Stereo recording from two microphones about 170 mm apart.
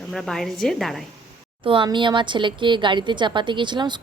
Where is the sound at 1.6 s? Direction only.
30° right (ahead or behind).